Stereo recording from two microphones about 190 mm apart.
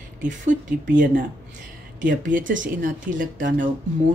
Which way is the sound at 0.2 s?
40° right (ahead or behind).